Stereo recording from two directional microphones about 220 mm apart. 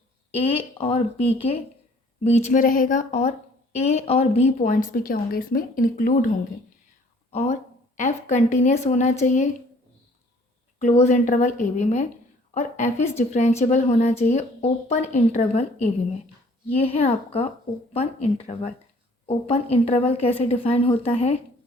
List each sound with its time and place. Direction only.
0.3 s a woman's voice: 25° left (ahead or behind)
7.3 s a woman's voice: 30° left (ahead or behind)
10.8 s a woman's voice: 30° left (ahead or behind)